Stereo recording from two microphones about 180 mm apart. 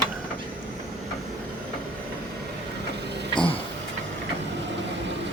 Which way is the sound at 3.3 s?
30° left (ahead or behind).